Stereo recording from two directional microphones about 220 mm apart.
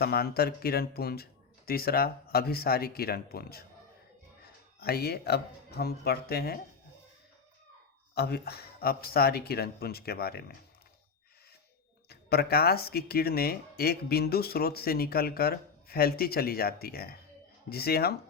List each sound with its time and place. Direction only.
0.0 s speech: 45° left (ahead or behind)
4.8 s speech: 45° left (ahead or behind)
8.1 s speech: 45° left (ahead or behind)
12.0 s speech: 45° left (ahead or behind)